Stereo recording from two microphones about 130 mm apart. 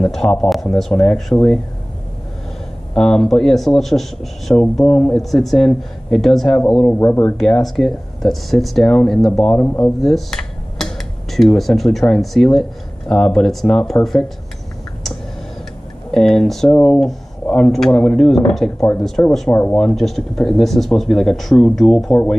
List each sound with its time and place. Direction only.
0.0 s speech: 5° left (ahead or behind)
2.9 s speech: 5° left (ahead or behind)
16.1 s speech: 5° left (ahead or behind)
19.2 s speech: 20° left (ahead or behind)
19.7 s speech: 5° left (ahead or behind)